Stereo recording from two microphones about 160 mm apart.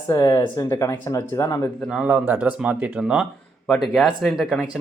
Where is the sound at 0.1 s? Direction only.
20° left (ahead or behind).